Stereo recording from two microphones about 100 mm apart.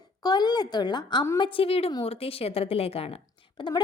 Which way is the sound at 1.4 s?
60° left (ahead or behind).